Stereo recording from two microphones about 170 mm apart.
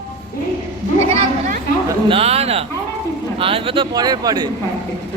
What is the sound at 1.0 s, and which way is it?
A man's voice, 35° right (ahead or behind).